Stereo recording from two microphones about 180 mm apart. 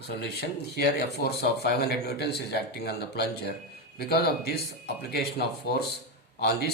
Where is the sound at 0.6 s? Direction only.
65° left (ahead or behind).